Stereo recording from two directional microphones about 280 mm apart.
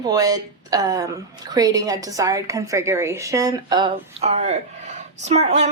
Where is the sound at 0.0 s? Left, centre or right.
Centre.